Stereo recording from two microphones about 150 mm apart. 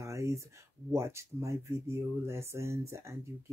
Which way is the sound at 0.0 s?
20° right (ahead or behind).